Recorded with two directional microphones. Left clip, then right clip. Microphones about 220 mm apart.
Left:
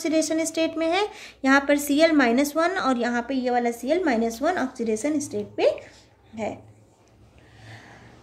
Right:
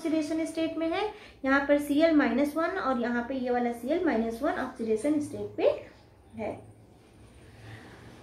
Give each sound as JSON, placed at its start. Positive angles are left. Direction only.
{"t": 0.0, "sound": "a woman's voice", "side_deg": 45}